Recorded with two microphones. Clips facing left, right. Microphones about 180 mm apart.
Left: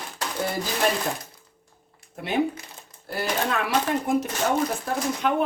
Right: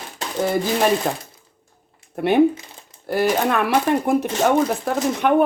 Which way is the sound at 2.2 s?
60° right (ahead or behind).